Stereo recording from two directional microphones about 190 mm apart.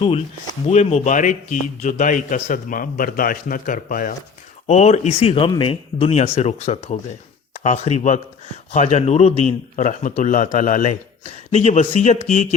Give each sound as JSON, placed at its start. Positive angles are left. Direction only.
{"t": 0.7, "sound": "a man's voice", "side_deg": 35}
{"t": 4.6, "sound": "speech", "side_deg": 35}